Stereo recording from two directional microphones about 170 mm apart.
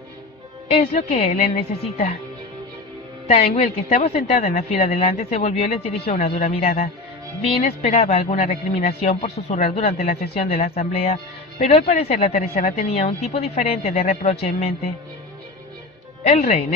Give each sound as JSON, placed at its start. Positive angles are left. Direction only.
{"t": 0.7, "sound": "speech", "side_deg": 35}
{"t": 3.3, "sound": "speech", "side_deg": 35}
{"t": 16.3, "sound": "speech", "side_deg": 40}